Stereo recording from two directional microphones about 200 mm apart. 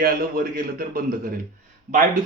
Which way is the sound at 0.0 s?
45° right (ahead or behind).